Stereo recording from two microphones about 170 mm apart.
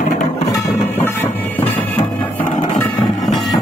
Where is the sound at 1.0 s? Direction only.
10° left (ahead or behind).